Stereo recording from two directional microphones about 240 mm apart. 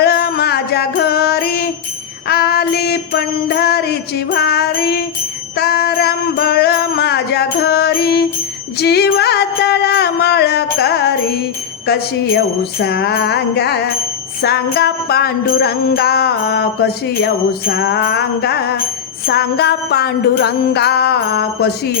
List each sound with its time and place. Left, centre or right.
0.0 s music: left
5.5 s jingle bell: left
8.8 s music: left
12.8 s music: left
14.4 s jingle bell: left
19.2 s music: left